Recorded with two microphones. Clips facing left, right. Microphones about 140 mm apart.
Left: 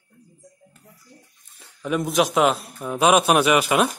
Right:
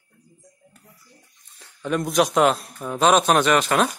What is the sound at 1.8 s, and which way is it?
A man's voice, 5° left (ahead or behind).